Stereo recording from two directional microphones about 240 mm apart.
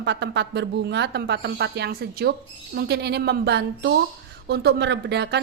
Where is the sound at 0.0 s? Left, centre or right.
Right.